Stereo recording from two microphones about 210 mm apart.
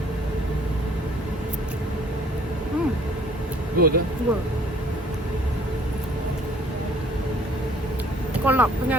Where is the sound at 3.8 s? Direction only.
45° right (ahead or behind).